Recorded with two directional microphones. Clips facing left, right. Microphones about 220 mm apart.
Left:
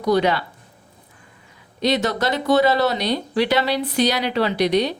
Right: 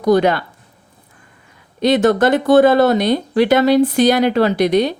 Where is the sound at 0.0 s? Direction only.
50° right (ahead or behind).